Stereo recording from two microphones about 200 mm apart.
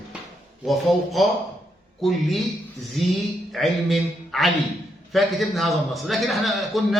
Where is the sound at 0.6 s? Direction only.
Centre (ahead or behind).